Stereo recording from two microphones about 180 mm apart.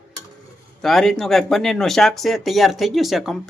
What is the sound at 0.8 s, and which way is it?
Speech, centre (ahead or behind).